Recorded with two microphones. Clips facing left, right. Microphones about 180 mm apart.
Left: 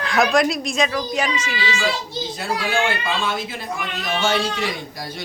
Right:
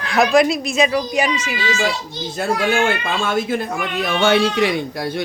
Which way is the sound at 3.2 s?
50° right (ahead or behind).